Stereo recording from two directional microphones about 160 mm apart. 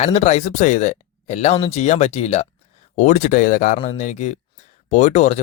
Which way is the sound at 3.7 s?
45° left (ahead or behind).